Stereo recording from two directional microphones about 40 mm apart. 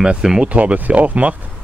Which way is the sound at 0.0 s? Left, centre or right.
Centre.